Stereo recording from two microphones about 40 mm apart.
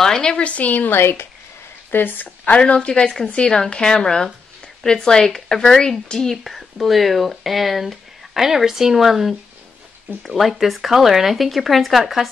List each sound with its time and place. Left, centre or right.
0.0 s speech: centre; by 1.2 s left
1.9 s speech: left
2.5 s speech: left
6.3 s speech: centre